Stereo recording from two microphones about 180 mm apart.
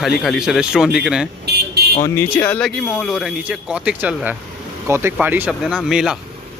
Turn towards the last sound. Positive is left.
turn(degrees=-5)  # may be behind; listen again after turning